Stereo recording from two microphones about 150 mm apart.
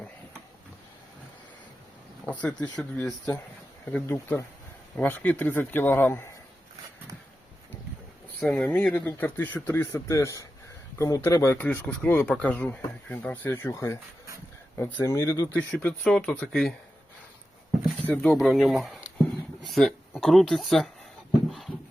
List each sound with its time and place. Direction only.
2.3 s speech: 10° left (ahead or behind)
8.4 s speech: 10° left (ahead or behind)
18.0 s speech: 10° left (ahead or behind)